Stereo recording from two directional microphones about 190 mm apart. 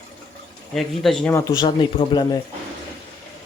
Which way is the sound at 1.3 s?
15° left (ahead or behind).